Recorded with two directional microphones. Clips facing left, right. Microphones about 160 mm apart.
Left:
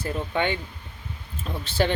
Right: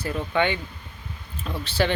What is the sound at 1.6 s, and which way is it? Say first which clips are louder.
Speech: even; 45° left (ahead or behind).